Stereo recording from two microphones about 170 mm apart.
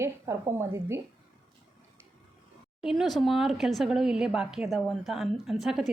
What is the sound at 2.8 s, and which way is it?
Speech, centre (ahead or behind).